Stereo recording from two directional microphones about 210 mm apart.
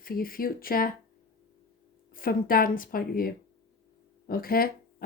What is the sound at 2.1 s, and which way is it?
Speech, 40° left (ahead or behind).